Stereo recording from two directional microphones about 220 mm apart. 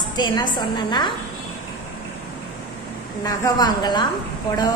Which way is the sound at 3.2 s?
15° left (ahead or behind).